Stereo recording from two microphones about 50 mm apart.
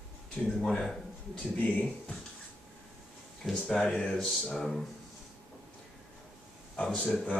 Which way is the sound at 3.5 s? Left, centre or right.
Centre.